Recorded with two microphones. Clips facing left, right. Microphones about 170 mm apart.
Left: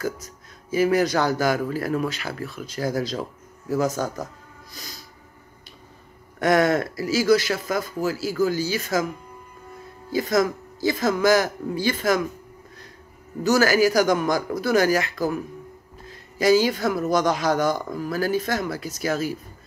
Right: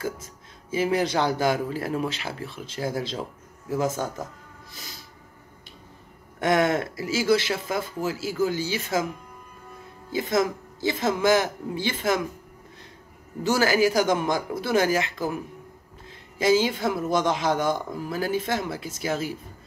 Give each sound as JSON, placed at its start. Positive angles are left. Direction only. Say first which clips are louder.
{"t": 0.0, "sound": "speech", "louder": "left 3 dB", "side_deg": -25}
{"t": 6.4, "sound": "speech", "louder": "left 3 dB", "side_deg": -20}
{"t": 10.1, "sound": "speech", "louder": "left 3 dB", "side_deg": -20}
{"t": 13.4, "sound": "speech", "louder": "left 3 dB", "side_deg": -25}